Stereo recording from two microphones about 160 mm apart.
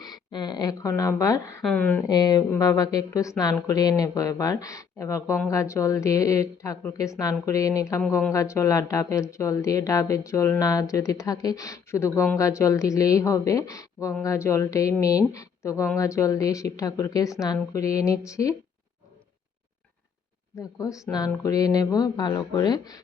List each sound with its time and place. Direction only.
0.0 s speech: 25° left (ahead or behind)
1.6 s speech: 10° left (ahead or behind)
2.0 s speech: 25° left (ahead or behind)
20.6 s speech: 20° left (ahead or behind)